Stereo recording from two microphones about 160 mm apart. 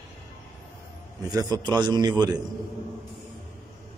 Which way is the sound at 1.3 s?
25° right (ahead or behind).